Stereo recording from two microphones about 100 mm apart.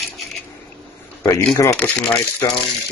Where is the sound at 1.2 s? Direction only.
30° left (ahead or behind).